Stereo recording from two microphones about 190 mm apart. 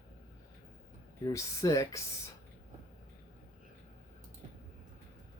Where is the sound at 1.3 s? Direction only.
15° left (ahead or behind).